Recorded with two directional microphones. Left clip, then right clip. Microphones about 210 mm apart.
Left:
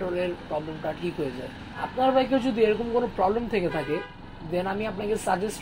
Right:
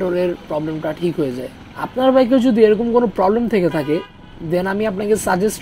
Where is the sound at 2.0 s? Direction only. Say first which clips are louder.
Right 9 dB; 50° right (ahead or behind).